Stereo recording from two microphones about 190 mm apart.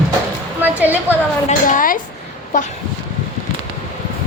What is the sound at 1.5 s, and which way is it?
Speech, 45° left (ahead or behind).